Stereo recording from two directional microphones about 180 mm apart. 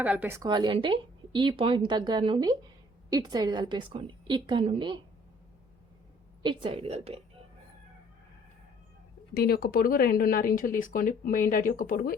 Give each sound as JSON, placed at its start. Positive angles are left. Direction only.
{"t": 0.0, "sound": "a woman's voice", "side_deg": -10}
{"t": 6.4, "sound": "a woman's voice", "side_deg": -30}
{"t": 9.3, "sound": "speech", "side_deg": 55}